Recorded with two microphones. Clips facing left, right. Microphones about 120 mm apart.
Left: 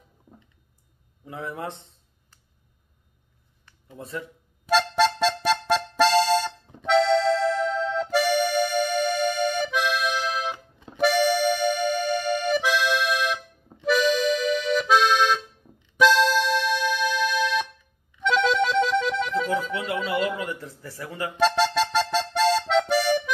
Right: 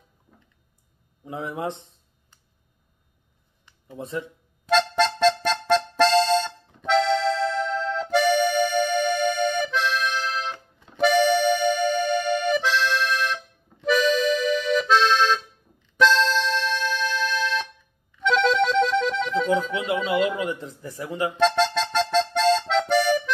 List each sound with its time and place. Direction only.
1.2 s speech: 20° right (ahead or behind)
4.0 s speech: 20° right (ahead or behind)
4.6 s accordion: 5° left (ahead or behind)
16.0 s music: 10° left (ahead or behind)
19.5 s music: 20° right (ahead or behind)
20.1 s a sound: 20° right (ahead or behind)
21.4 s accordion: 5° left (ahead or behind)